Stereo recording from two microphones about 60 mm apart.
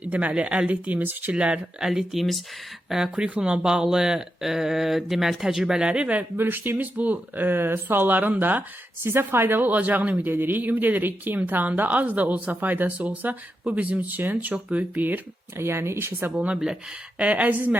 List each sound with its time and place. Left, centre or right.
0.0 s speech: right
1.8 s speech: centre
3.2 s speech: centre
6.3 s speech: right
15.5 s speech: right
17.2 s speech: right